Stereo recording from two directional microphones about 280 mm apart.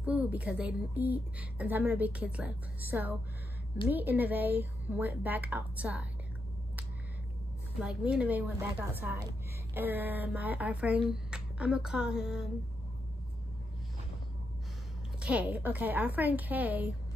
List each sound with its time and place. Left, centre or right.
0.0 s a woman's voice: centre
7.8 s a woman's voice: centre
15.1 s a woman's voice: centre